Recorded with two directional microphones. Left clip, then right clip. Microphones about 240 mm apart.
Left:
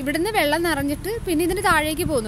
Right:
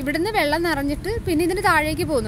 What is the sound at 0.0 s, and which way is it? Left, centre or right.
A woman's voice, centre.